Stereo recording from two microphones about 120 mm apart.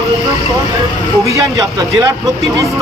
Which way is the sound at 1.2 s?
25° right (ahead or behind).